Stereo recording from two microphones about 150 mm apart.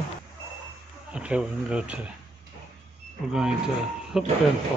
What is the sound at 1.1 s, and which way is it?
Speech, 5° right (ahead or behind).